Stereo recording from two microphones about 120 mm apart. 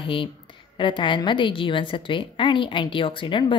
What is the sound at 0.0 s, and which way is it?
A woman's voice, 45° left (ahead or behind).